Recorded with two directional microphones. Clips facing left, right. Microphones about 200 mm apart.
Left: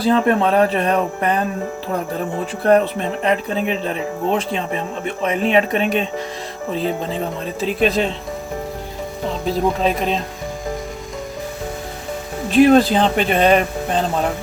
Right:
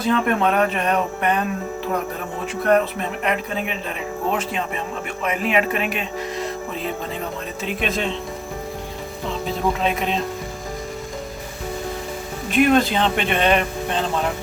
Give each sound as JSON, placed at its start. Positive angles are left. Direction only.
{"t": 0.0, "sound": "speech", "side_deg": 35}
{"t": 2.6, "sound": "speech", "side_deg": 30}
{"t": 9.9, "sound": "speech", "side_deg": 0}
{"t": 12.5, "sound": "speech", "side_deg": 35}